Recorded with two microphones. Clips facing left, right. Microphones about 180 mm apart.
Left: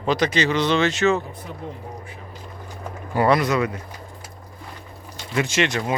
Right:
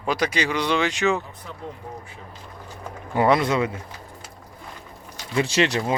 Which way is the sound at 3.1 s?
20° right (ahead or behind).